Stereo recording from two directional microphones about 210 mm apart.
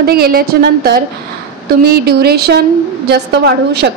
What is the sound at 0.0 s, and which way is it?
A woman's voice, 45° right (ahead or behind).